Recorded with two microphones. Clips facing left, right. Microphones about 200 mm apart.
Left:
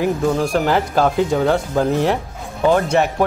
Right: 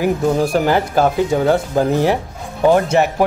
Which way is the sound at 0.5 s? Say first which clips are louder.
Right 2 dB; 5° right (ahead or behind).